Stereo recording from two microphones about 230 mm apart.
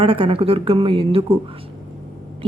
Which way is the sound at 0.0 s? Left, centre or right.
Right.